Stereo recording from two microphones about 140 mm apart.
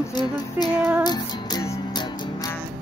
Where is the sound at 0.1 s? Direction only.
30° left (ahead or behind).